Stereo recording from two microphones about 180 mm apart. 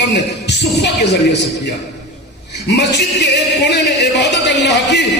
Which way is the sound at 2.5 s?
75° left (ahead or behind).